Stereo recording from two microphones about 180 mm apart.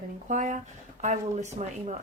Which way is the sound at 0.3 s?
45° right (ahead or behind).